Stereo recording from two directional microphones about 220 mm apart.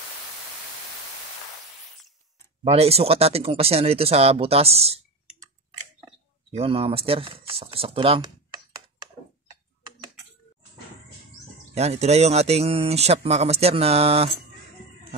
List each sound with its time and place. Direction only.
2.6 s speech: 30° right (ahead or behind)
6.5 s speech: 25° right (ahead or behind)
11.7 s speech: 30° right (ahead or behind)